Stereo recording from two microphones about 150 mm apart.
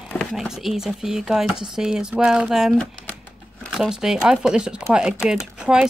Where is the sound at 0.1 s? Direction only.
5° left (ahead or behind).